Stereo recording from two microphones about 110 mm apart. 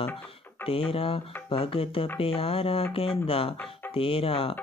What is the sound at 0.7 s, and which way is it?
Speech, 60° left (ahead or behind).